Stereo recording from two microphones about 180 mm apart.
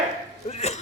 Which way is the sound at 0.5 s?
40° left (ahead or behind).